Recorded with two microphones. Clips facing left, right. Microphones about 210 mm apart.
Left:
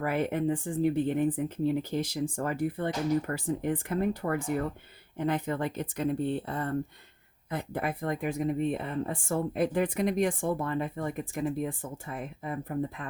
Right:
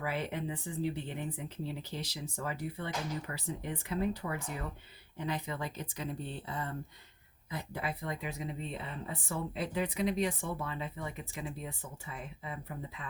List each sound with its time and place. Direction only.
0.0 s speech: 50° left (ahead or behind)